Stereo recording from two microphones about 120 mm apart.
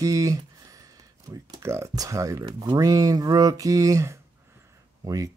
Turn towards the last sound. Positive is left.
turn(degrees=-30)  # may be behind; listen again after turning